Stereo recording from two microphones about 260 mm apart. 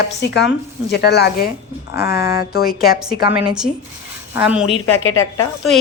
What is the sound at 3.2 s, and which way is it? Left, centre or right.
A woman's voice, centre.